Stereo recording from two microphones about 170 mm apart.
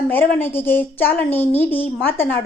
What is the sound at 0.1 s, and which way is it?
A woman's voice, 10° left (ahead or behind).